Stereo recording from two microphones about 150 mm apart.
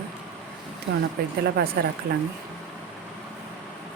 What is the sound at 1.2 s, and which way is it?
Speech, 90° right.